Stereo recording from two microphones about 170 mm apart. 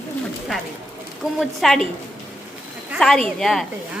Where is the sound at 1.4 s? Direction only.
Centre (ahead or behind).